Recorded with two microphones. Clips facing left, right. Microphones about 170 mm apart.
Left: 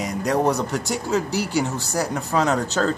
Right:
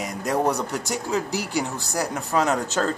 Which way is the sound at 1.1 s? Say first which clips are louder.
Left 3 dB; 35° left (ahead or behind).